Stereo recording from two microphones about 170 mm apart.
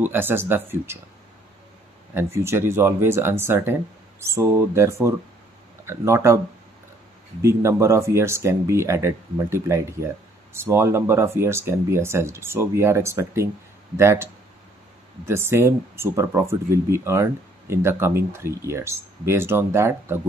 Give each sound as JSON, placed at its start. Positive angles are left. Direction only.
{"t": 0.0, "sound": "speech", "side_deg": -10}
{"t": 2.1, "sound": "speech", "side_deg": -15}
{"t": 7.4, "sound": "speech", "side_deg": -15}